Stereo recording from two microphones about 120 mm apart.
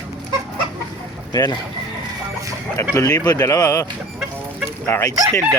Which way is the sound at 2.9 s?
25° left (ahead or behind).